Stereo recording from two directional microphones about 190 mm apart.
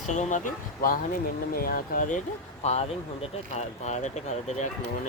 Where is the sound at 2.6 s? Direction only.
35° left (ahead or behind).